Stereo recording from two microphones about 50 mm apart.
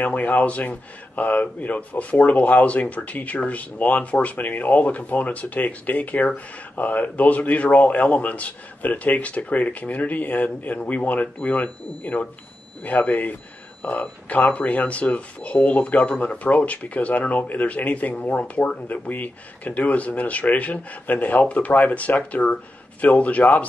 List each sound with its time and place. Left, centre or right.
0.0 s speech: left